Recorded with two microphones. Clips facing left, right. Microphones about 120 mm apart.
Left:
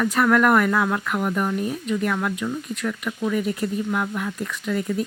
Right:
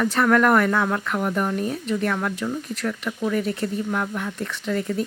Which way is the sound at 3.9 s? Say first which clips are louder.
Left 1 dB; 5° left (ahead or behind).